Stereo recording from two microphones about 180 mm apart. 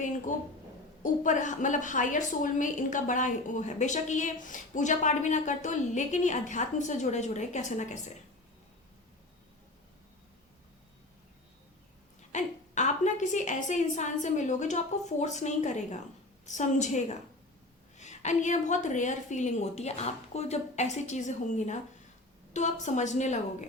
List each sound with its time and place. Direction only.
0.3 s a woman's voice: 45° left (ahead or behind)
12.3 s a woman's voice: 40° left (ahead or behind)